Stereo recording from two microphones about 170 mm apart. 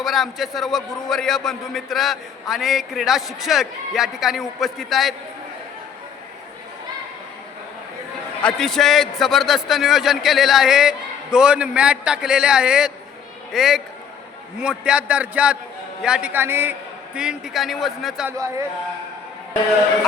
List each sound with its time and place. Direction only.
0.0 s a man's voice: centre (ahead or behind)
8.4 s a man's voice: 5° left (ahead or behind)
18.3 s a man's voice: 20° right (ahead or behind)